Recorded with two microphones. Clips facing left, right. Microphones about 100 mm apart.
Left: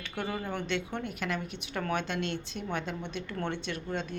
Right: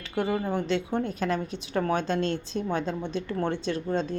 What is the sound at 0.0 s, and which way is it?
A woman's voice, 30° right (ahead or behind).